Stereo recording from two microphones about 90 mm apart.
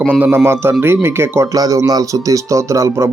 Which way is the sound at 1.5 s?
40° right (ahead or behind).